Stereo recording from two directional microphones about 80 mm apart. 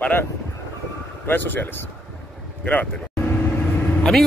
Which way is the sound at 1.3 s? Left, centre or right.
Left.